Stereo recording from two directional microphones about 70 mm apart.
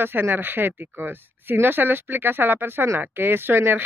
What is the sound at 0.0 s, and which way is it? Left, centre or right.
Speech, right.